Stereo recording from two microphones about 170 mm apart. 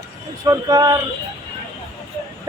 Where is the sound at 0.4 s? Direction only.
20° right (ahead or behind).